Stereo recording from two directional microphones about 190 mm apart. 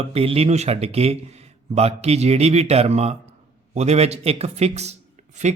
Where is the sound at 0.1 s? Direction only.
30° right (ahead or behind).